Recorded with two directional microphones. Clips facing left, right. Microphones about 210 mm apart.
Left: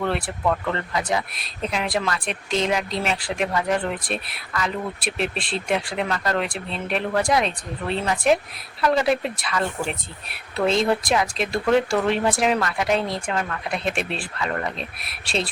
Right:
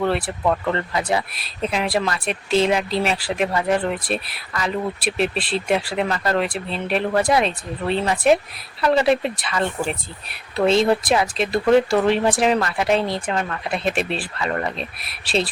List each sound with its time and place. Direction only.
0.2 s speech: 20° right (ahead or behind)
0.9 s speech: 5° right (ahead or behind)